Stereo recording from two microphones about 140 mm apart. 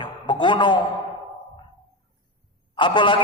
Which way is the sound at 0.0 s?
35° left (ahead or behind).